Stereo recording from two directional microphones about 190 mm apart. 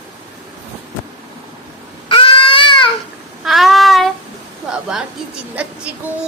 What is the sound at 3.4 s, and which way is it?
Child singing, centre (ahead or behind).